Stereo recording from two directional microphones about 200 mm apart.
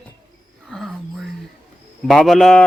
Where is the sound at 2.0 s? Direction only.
Centre (ahead or behind).